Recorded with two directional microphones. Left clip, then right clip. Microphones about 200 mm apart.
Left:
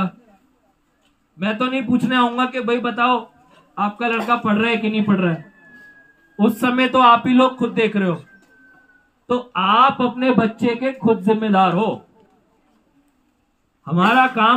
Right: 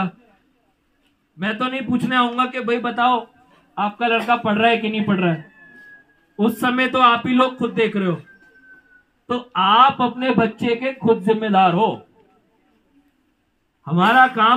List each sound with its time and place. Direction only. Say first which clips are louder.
1.4 s speech: left 2 dB; 10° left (ahead or behind)
6.4 s speech: left 1 dB; 10° left (ahead or behind)
9.3 s speech: right 1 dB; 10° left (ahead or behind)
13.8 s speech: right 1 dB; 10° left (ahead or behind)